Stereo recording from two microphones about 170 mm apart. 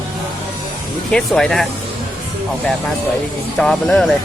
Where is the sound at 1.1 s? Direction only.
5° left (ahead or behind).